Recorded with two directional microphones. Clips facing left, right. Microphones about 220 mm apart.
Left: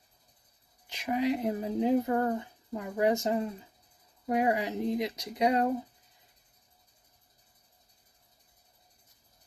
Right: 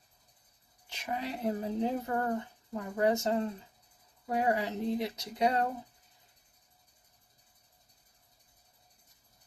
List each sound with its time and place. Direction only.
0.9 s speech: 15° left (ahead or behind)